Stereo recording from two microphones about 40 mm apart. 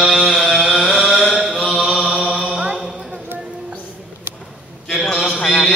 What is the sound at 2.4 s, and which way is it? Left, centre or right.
Mantra, centre.